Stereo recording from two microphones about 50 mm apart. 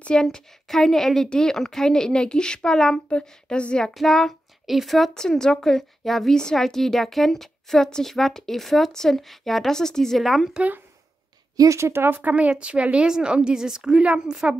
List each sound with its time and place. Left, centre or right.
0.0 s a woman's voice: centre
3.9 s speech: centre
5.1 s a woman's voice: centre
10.2 s speech: centre
11.6 s a woman's voice: right
11.9 s speech: right
12.2 s a woman's voice: right; by 14.6 s centre